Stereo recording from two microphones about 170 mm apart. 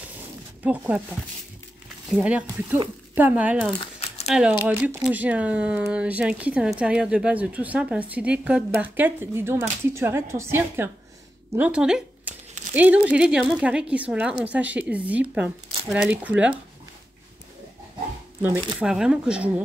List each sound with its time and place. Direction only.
0.7 s speech: 10° right (ahead or behind)
2.0 s speech: 5° right (ahead or behind)
3.8 s crumpling: 35° left (ahead or behind)
4.3 s speech: 5° right (ahead or behind)
18.8 s speech: 5° right (ahead or behind)